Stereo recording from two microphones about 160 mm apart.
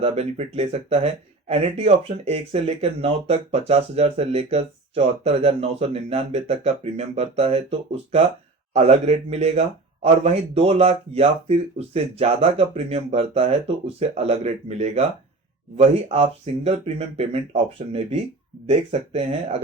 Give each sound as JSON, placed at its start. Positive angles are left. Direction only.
{"t": 0.0, "sound": "a man's voice", "side_deg": -40}